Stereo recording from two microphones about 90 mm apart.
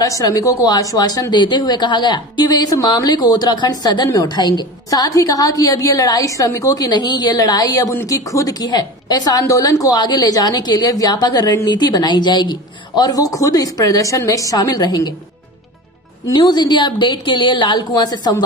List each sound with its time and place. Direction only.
0.0 s a woman's voice: 40° left (ahead or behind)
16.3 s a woman's voice: 55° left (ahead or behind)